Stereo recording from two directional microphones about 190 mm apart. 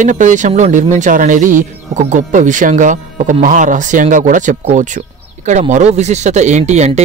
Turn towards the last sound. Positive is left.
turn(degrees=-35)  # may be behind; listen again after turning